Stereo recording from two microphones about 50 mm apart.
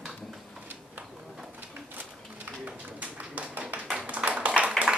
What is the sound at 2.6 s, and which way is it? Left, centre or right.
Tap, right.